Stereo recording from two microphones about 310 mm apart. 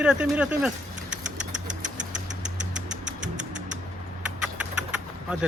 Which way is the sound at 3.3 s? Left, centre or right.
Right.